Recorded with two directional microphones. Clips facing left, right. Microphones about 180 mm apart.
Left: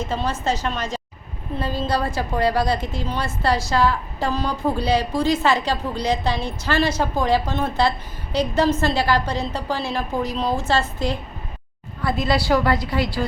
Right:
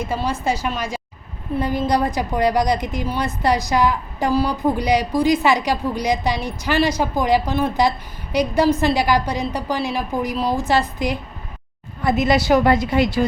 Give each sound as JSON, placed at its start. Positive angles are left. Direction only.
{"t": 0.0, "sound": "a woman's voice", "side_deg": -10}